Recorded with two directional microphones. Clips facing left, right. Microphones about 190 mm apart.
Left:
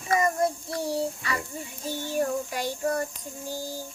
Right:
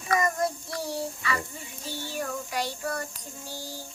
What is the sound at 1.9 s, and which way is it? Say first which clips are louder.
Child singing: left 6 dB; 45° left (ahead or behind).